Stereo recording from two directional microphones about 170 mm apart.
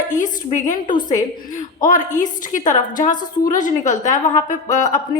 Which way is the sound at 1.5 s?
50° left (ahead or behind).